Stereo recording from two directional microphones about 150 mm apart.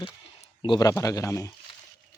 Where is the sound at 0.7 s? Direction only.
20° left (ahead or behind).